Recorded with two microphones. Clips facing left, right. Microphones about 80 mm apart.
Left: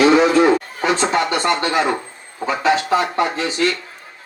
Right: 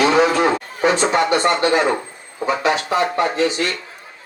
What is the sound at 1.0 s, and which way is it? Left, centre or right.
Speech, right.